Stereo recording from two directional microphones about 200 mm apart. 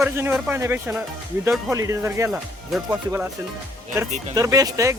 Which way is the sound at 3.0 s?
10° right (ahead or behind).